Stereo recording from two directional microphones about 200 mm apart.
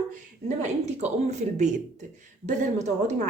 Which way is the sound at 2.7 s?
35° right (ahead or behind).